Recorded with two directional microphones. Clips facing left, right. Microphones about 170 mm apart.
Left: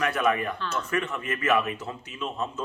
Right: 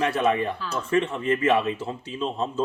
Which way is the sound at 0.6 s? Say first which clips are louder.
Right 1 dB; 10° right (ahead or behind).